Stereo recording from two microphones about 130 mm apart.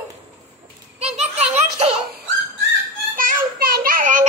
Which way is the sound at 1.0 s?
60° right (ahead or behind).